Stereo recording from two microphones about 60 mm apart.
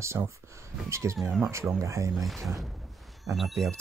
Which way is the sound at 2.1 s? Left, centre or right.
Centre.